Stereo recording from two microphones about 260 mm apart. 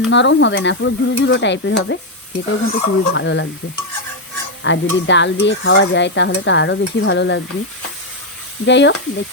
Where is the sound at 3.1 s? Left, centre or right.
Left.